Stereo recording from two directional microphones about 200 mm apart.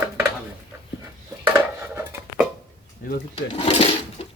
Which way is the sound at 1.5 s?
10° right (ahead or behind).